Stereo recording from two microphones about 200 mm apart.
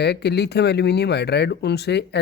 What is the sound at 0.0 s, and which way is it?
Speech, 55° left (ahead or behind).